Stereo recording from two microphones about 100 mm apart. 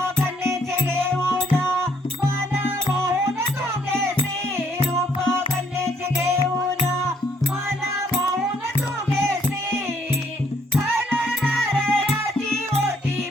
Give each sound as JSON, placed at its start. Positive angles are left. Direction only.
{"t": 1.6, "sound": "music", "side_deg": -25}
{"t": 11.2, "sound": "music", "side_deg": 5}